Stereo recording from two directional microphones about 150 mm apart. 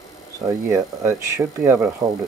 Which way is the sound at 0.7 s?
20° right (ahead or behind).